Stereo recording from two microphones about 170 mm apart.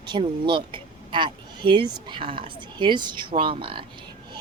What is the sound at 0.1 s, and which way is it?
A woman's voice, 30° right (ahead or behind).